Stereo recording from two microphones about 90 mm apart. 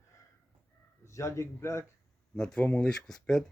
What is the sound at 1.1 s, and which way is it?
Speech, 35° left (ahead or behind).